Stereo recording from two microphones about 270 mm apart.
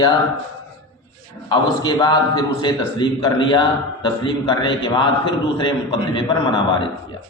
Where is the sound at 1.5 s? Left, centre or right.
Centre.